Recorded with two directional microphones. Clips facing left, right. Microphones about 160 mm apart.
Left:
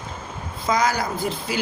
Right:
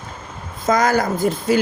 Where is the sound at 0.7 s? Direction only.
50° right (ahead or behind).